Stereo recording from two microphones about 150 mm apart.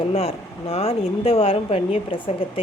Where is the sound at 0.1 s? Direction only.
40° left (ahead or behind).